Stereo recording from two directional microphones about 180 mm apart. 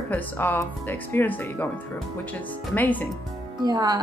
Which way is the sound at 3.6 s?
20° right (ahead or behind).